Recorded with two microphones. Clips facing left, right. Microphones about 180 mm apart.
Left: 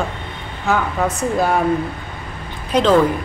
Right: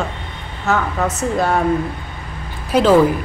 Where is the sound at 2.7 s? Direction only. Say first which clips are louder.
Right 2 dB; 5° right (ahead or behind).